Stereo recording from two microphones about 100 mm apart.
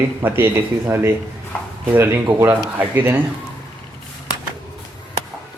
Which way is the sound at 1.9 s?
20° right (ahead or behind).